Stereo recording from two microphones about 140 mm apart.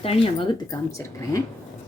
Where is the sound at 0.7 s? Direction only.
20° left (ahead or behind).